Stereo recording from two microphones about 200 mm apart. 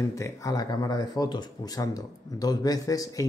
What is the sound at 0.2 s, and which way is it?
Speech, 20° left (ahead or behind).